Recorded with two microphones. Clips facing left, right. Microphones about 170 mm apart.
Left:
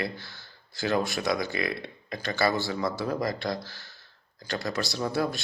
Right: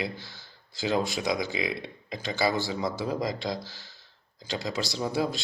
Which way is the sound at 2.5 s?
20° right (ahead or behind).